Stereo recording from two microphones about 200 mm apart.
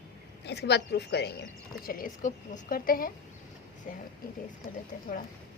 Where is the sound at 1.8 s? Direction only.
45° left (ahead or behind).